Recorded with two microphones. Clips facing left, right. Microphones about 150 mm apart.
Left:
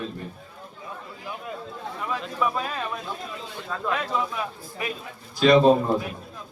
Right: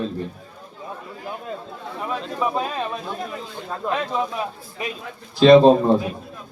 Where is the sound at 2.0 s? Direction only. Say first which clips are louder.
Right 2 dB; 25° right (ahead or behind).